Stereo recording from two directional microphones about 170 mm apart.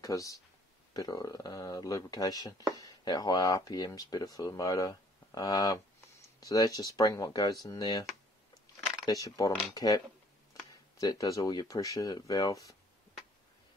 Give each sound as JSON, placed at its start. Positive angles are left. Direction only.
{"t": 0.0, "sound": "speech", "side_deg": 20}